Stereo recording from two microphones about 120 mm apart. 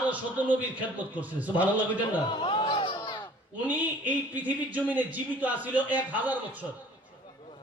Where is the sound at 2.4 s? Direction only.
40° left (ahead or behind).